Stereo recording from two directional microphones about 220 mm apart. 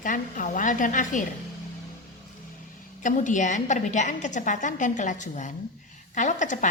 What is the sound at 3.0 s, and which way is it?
A woman's voice, 35° left (ahead or behind).